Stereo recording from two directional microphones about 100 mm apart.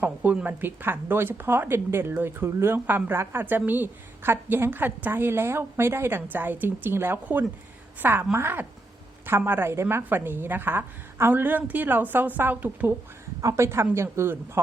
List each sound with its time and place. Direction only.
0.0 s a woman's voice: 15° right (ahead or behind)
13.4 s a woman's voice: 30° right (ahead or behind)